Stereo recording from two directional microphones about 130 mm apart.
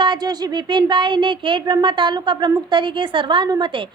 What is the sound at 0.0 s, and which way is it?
A woman's voice, 35° right (ahead or behind).